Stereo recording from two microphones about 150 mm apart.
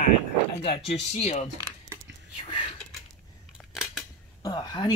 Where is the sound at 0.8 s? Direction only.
45° left (ahead or behind).